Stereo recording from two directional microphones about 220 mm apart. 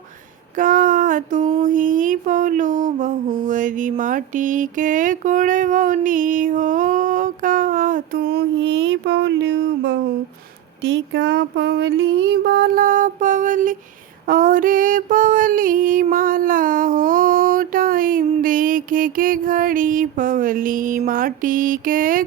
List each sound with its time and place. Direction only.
0.5 s female singing: 40° right (ahead or behind)
1.6 s mantra: 35° right (ahead or behind)